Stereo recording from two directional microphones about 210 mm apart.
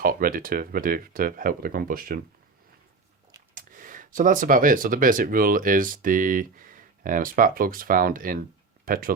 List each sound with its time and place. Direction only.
0.0 s speech: 40° right (ahead or behind)
3.5 s speech: 40° right (ahead or behind)